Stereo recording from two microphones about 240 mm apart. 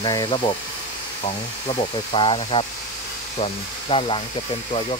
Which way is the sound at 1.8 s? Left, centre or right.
Left.